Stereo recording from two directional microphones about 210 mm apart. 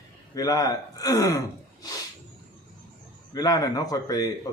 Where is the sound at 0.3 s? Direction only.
15° left (ahead or behind).